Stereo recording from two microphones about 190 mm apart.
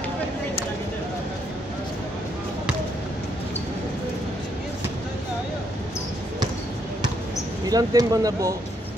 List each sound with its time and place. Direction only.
7.7 s speech: 20° right (ahead or behind)